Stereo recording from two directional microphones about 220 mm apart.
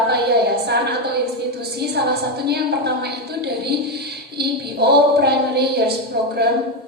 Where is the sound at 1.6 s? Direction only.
45° right (ahead or behind).